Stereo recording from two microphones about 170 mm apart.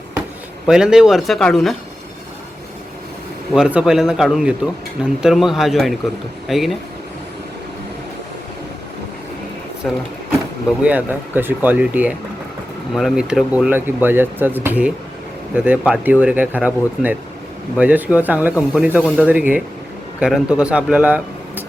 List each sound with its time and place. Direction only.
0.7 s speech: 5° right (ahead or behind)
3.5 s speech: 5° right (ahead or behind)
9.8 s speech: centre (ahead or behind)
10.8 s speech: 10° right (ahead or behind)